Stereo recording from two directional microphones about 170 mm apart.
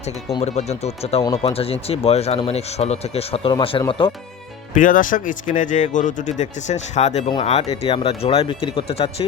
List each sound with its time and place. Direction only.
0.3 s speech: 40° left (ahead or behind)
4.7 s speech: 50° left (ahead or behind); by 9.2 s 35° left (ahead or behind)